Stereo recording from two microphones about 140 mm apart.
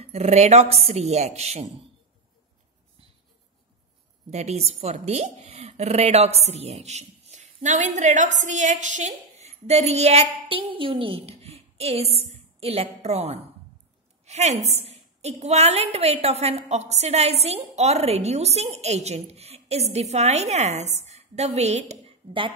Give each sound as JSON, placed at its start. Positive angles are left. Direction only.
{"t": 0.0, "sound": "speech", "side_deg": -50}
{"t": 4.3, "sound": "a woman's voice", "side_deg": -50}